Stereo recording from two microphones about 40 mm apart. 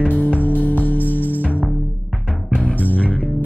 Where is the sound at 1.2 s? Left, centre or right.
Right.